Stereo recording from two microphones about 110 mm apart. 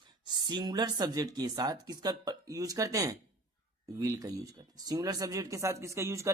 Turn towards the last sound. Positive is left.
turn(degrees=-25)  # may be behind; listen again after turning